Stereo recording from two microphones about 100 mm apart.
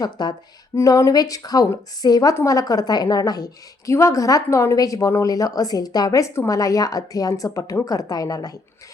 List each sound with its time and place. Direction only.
0.0 s speech: 45° left (ahead or behind)
0.8 s a woman's voice: 35° left (ahead or behind)